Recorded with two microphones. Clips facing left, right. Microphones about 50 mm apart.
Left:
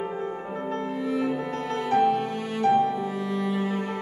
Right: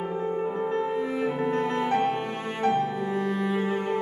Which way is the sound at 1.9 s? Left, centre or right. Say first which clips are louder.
Left 7 dB; right.